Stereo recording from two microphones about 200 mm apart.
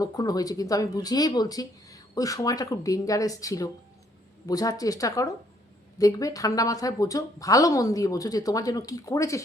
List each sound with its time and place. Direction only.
0.0 s speech: 20° left (ahead or behind)